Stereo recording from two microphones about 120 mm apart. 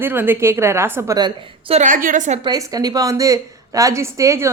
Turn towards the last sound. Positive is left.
turn(degrees=-25)  # may be behind; listen again after turning